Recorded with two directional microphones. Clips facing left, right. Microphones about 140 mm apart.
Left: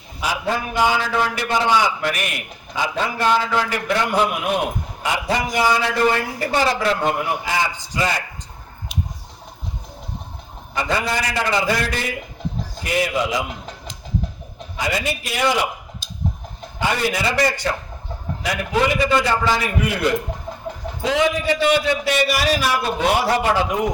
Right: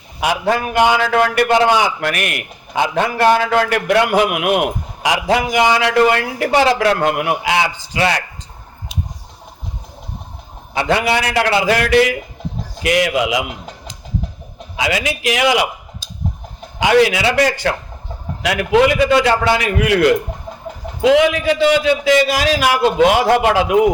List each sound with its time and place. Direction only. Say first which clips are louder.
0.2 s a man's voice: right 6 dB; 70° right (ahead or behind)
5.0 s a man's voice: right 6 dB; 90° right; by 8.2 s 75° right (ahead or behind)
10.8 s a man's voice: right 6 dB; 70° right (ahead or behind); by 13.4 s 90° right
14.8 s a man's voice: right 4 dB; 90° right
16.8 s a man's voice: right 8 dB; 90° right